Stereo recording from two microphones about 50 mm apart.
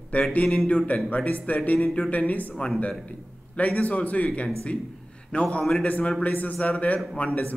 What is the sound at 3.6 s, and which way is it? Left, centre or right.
A man's voice, left.